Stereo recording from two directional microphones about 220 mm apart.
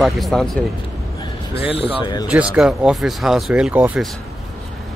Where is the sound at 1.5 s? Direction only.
25° left (ahead or behind).